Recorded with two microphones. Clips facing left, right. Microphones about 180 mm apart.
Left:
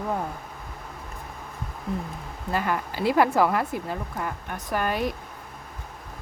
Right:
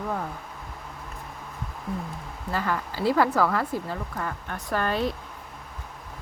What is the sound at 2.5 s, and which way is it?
Speech, 15° left (ahead or behind).